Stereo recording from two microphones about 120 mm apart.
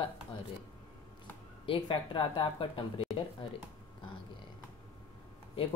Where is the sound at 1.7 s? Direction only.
45° left (ahead or behind).